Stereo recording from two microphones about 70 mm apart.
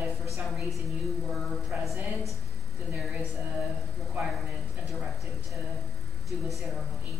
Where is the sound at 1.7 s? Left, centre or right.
Centre.